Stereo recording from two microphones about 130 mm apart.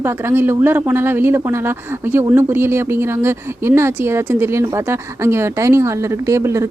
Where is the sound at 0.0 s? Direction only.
20° right (ahead or behind).